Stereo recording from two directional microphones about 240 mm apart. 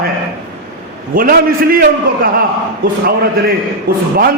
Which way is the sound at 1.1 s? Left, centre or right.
Right.